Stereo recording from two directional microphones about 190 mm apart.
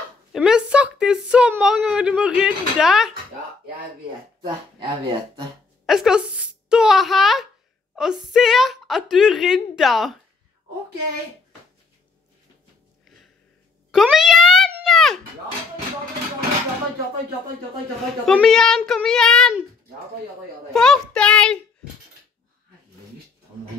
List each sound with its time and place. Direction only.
0.3 s a sound: 5° right (ahead or behind)
4.4 s speech: 25° right (ahead or behind)
5.9 s a woman's voice: 5° right (ahead or behind)
13.9 s a woman's voice: centre (ahead or behind)
14.7 s a sound: centre (ahead or behind)
18.2 s a woman's voice: 5° left (ahead or behind)
20.7 s a woman's voice: 5° left (ahead or behind)